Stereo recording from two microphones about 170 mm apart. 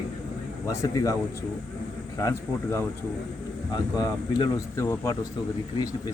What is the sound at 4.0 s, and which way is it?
Speech, 20° left (ahead or behind).